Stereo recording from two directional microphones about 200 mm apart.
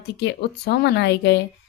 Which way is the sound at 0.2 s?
55° left (ahead or behind).